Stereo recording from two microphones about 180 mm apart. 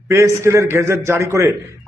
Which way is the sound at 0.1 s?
15° right (ahead or behind).